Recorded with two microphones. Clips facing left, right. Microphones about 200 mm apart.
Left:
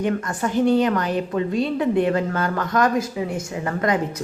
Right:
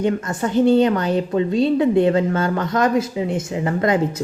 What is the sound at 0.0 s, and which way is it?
A woman's voice, 25° right (ahead or behind).